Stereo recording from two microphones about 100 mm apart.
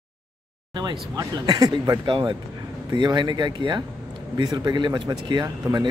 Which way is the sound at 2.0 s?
55° right (ahead or behind).